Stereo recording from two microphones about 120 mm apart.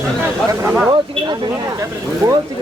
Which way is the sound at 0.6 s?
10° right (ahead or behind).